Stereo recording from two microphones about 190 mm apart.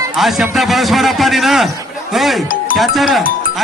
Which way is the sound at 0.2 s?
Centre (ahead or behind).